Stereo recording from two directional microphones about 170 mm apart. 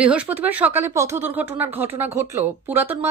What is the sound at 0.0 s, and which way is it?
Speech, 10° right (ahead or behind).